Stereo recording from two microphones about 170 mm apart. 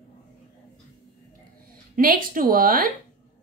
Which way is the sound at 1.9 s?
55° right (ahead or behind).